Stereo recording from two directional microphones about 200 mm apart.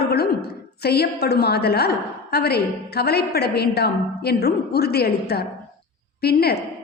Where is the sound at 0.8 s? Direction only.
50° left (ahead or behind).